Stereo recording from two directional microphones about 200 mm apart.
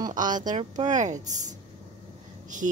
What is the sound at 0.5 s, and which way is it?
A woman's voice, 35° right (ahead or behind).